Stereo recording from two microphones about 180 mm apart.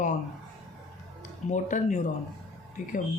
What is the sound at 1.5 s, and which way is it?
Speech, 45° left (ahead or behind).